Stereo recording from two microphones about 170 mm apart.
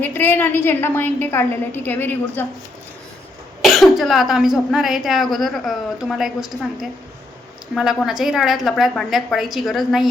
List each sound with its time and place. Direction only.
0.0 s a woman's voice: 10° left (ahead or behind)
3.6 s a woman's voice: centre (ahead or behind)
7.8 s a woman's voice: centre (ahead or behind)